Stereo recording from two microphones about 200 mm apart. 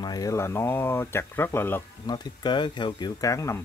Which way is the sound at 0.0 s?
20° left (ahead or behind).